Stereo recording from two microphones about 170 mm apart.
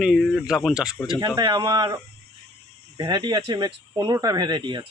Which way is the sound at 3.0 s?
25° right (ahead or behind).